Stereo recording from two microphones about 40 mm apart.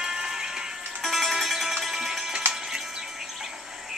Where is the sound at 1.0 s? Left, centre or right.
Centre.